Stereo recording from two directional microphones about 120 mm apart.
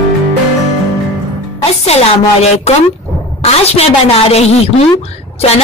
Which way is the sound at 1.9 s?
60° left (ahead or behind).